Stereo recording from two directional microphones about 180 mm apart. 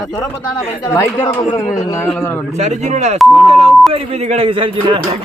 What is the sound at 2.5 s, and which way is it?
Speech, 40° right (ahead or behind).